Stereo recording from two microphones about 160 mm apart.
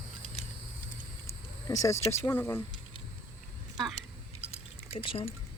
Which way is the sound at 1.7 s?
20° left (ahead or behind).